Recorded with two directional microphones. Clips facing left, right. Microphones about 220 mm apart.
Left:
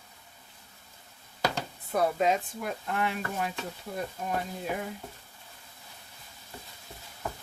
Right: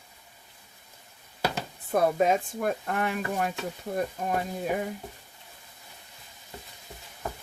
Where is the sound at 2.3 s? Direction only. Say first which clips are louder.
Right 3 dB; 50° right (ahead or behind).